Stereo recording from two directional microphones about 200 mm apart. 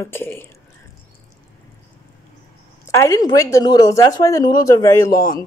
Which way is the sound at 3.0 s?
20° left (ahead or behind).